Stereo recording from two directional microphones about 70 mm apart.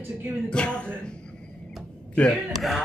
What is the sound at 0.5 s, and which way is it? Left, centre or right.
Speech, centre.